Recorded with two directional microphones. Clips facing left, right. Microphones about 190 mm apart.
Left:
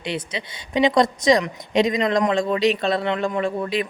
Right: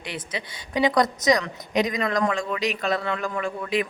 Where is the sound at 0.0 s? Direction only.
25° left (ahead or behind).